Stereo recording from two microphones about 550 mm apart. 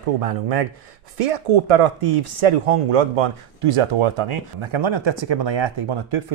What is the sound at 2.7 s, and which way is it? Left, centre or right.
Speech, right.